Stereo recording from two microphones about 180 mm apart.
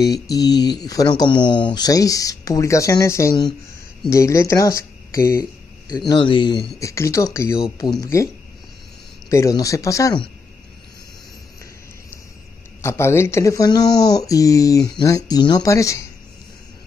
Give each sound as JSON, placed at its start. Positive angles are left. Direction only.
{"t": 0.0, "sound": "speech", "side_deg": 20}
{"t": 9.3, "sound": "speech", "side_deg": 15}
{"t": 12.8, "sound": "speech", "side_deg": 15}